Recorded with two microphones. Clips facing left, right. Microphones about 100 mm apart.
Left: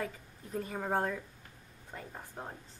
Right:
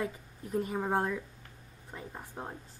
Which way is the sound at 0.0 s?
15° right (ahead or behind).